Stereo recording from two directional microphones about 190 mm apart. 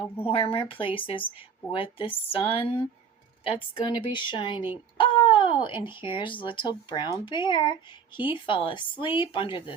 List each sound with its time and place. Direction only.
0.3 s speech: 30° left (ahead or behind)